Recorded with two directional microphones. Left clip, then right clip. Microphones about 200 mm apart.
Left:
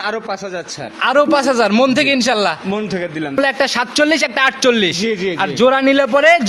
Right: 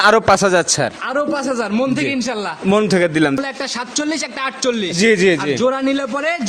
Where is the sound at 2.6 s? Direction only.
60° right (ahead or behind).